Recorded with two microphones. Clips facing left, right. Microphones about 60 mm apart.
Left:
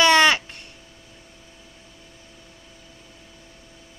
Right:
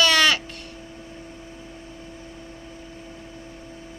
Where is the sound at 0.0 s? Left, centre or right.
Left.